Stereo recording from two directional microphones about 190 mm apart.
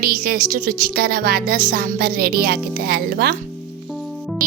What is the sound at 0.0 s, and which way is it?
Music, 50° right (ahead or behind).